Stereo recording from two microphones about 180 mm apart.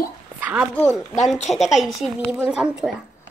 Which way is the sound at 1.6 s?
Centre (ahead or behind).